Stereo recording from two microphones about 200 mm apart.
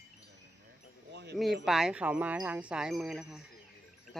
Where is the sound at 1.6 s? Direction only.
Centre (ahead or behind).